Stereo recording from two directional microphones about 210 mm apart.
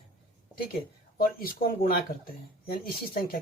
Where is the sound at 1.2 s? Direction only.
45° left (ahead or behind).